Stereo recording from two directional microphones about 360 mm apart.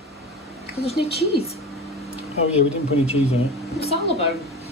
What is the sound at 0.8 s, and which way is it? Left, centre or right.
Speech, centre.